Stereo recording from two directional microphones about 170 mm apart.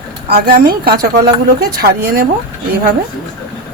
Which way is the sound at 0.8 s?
60° right (ahead or behind).